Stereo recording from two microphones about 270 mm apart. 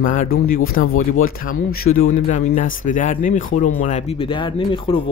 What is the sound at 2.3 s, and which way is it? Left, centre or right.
Speech, left.